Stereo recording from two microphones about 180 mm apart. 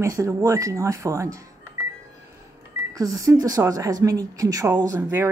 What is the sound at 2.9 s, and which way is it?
Speech, 20° right (ahead or behind).